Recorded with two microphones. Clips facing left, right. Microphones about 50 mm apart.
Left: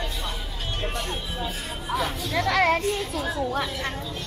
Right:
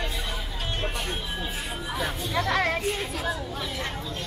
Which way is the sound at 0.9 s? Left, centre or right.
Centre.